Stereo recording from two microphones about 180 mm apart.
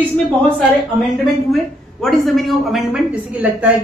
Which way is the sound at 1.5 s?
Centre (ahead or behind).